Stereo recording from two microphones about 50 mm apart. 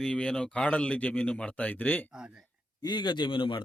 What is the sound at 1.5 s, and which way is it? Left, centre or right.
Speech, left.